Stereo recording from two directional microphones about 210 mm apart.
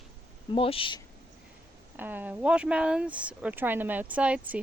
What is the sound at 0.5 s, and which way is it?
Speech, 25° left (ahead or behind).